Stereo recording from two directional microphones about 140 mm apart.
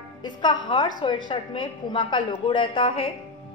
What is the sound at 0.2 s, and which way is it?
A woman's voice, 30° left (ahead or behind).